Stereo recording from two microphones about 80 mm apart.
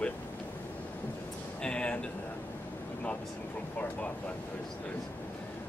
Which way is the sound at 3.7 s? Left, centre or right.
Centre.